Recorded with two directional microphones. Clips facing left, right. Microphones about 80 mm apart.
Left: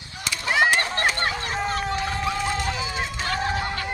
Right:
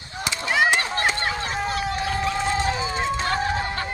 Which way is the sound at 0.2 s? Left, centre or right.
Right.